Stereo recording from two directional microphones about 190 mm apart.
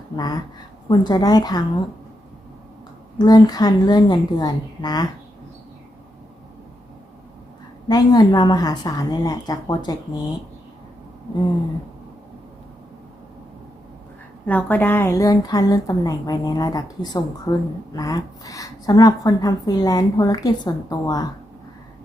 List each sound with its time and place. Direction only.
0.2 s speech: 20° left (ahead or behind)
3.2 s speech: 20° left (ahead or behind)
7.9 s speech: 20° left (ahead or behind)
14.4 s speech: 10° left (ahead or behind)